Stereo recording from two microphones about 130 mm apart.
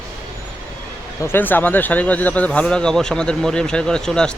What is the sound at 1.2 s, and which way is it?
Speech, 15° left (ahead or behind).